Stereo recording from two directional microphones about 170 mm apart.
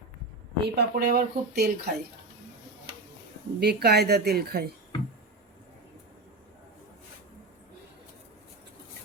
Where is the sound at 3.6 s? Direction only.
70° right (ahead or behind).